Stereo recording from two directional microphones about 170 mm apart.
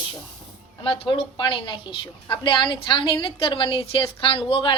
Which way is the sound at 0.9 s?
30° left (ahead or behind).